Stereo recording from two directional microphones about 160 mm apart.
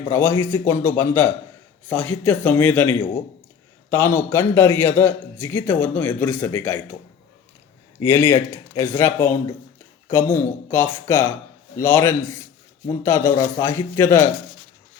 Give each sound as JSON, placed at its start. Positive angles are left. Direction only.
{"t": 0.1, "sound": "a man's voice", "side_deg": 15}
{"t": 8.0, "sound": "a man's voice", "side_deg": 15}